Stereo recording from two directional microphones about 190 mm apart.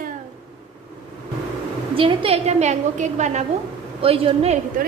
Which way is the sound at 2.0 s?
30° right (ahead or behind).